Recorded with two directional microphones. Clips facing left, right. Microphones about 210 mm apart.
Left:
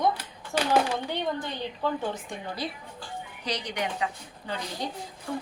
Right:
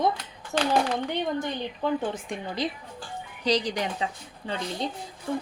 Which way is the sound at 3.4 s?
30° right (ahead or behind).